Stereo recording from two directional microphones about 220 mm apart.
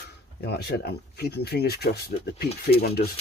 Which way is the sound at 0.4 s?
45° left (ahead or behind).